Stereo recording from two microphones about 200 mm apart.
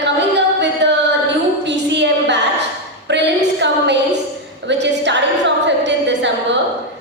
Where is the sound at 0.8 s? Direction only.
60° right (ahead or behind).